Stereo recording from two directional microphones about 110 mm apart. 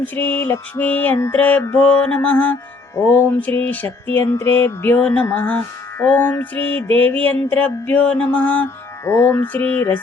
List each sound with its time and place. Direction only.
0.0 s music: 15° left (ahead or behind)